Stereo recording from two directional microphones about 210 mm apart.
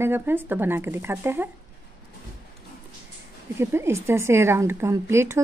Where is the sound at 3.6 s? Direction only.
10° right (ahead or behind).